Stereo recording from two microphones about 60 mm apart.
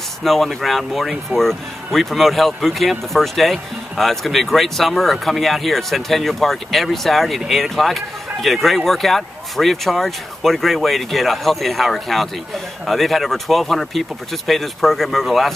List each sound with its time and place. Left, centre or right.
0.2 s speech: centre